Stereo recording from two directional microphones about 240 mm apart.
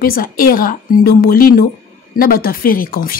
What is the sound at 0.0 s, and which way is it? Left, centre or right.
A woman's voice, left.